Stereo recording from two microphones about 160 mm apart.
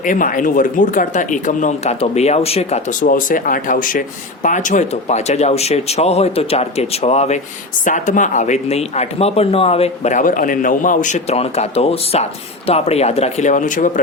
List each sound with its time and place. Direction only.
0.0 s speech: 55° left (ahead or behind); by 2.8 s 40° left (ahead or behind)
3.0 s speech: 60° left (ahead or behind)